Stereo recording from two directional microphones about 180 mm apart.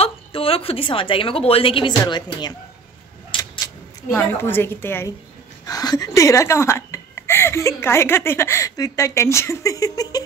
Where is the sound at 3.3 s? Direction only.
25° left (ahead or behind).